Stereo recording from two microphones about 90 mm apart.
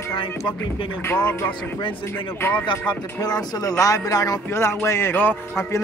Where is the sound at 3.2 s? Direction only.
45° left (ahead or behind).